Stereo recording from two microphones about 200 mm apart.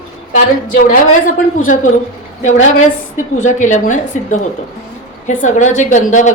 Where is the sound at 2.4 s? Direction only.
35° left (ahead or behind).